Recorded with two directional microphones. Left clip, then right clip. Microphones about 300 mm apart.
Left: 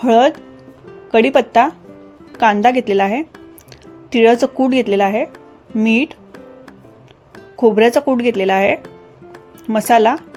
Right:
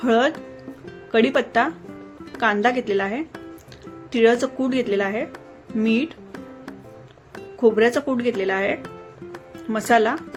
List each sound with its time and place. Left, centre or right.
0.0 s a woman's voice: centre
7.6 s speech: centre